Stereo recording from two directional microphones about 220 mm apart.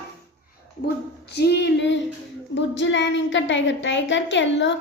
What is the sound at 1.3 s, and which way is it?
A woman's voice, 50° left (ahead or behind).